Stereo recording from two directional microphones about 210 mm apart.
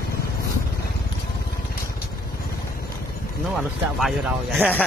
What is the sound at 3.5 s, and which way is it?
Speech, centre (ahead or behind).